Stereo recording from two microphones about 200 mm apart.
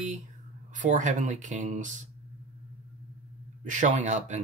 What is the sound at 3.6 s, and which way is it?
Speech, 40° right (ahead or behind).